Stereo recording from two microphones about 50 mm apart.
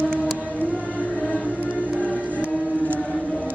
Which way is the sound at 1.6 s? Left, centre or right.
Right.